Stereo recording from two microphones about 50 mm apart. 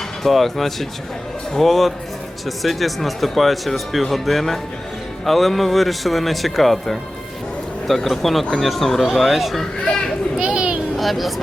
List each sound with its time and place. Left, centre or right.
0.2 s speech: centre
10.3 s children playing: centre
10.9 s speech: centre